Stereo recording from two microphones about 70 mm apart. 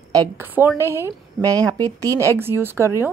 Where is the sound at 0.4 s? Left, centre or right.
Right.